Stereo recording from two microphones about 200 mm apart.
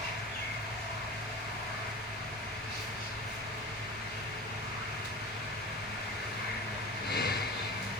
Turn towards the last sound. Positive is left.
turn(degrees=55)  # may be behind; listen again after turning